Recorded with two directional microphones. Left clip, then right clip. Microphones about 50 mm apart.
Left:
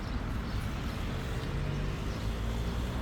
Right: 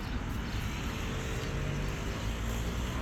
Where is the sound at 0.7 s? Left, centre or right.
Left.